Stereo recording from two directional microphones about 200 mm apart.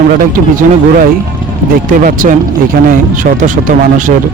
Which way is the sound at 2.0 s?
45° right (ahead or behind).